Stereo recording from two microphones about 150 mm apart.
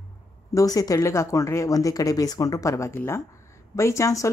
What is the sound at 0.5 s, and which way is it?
Speech, 25° left (ahead or behind).